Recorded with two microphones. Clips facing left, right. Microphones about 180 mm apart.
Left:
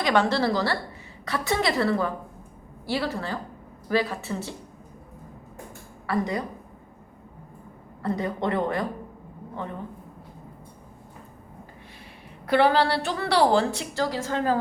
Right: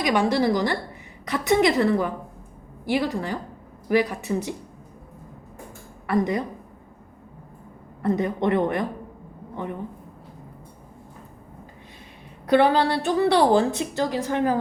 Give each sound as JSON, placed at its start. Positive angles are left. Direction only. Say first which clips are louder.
{"t": 0.0, "sound": "a woman's voice", "louder": "right 1 dB", "side_deg": -15}
{"t": 6.1, "sound": "a woman's voice", "louder": "right 4 dB", "side_deg": -20}
{"t": 8.0, "sound": "a woman's voice", "louder": "right 4 dB", "side_deg": -20}
{"t": 12.5, "sound": "a woman's voice", "louder": "right 2 dB", "side_deg": -20}